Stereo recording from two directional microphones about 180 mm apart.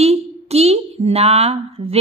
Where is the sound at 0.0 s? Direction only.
35° right (ahead or behind).